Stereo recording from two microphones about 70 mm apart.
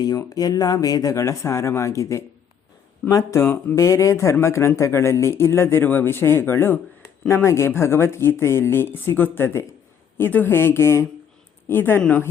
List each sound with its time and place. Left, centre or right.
0.2 s speech: left
3.4 s speech: left
3.8 s speech: left